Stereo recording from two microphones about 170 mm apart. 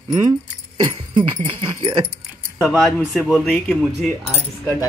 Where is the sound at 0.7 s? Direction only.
25° right (ahead or behind).